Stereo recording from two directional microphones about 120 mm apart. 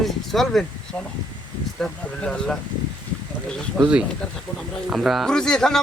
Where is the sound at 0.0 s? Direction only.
Centre (ahead or behind).